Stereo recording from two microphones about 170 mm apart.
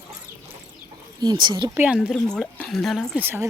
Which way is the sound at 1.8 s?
5° right (ahead or behind).